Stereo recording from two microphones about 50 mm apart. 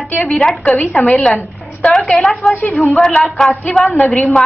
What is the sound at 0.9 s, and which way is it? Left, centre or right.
A woman's voice, left.